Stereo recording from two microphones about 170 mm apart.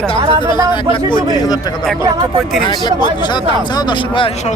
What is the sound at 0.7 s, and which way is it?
Speech, 25° left (ahead or behind).